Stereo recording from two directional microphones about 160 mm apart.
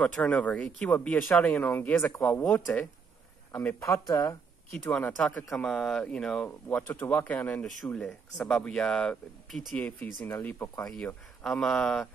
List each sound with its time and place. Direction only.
0.0 s speech: 10° left (ahead or behind)
3.9 s speech: 20° left (ahead or behind)
10.9 s speech: 5° left (ahead or behind)